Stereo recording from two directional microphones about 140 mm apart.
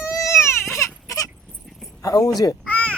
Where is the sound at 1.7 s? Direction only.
Centre (ahead or behind).